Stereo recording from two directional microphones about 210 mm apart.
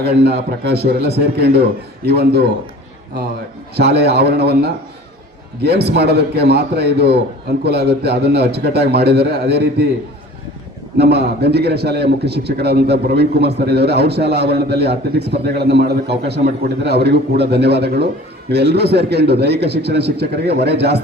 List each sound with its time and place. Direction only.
0.0 s a man's voice: 50° right (ahead or behind)
3.8 s a man's voice: 50° right (ahead or behind)
10.9 s a man's voice: 50° right (ahead or behind)